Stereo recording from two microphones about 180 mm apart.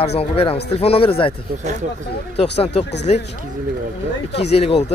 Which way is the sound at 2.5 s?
35° left (ahead or behind).